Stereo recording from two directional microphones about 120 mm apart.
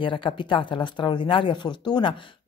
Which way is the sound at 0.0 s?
45° left (ahead or behind).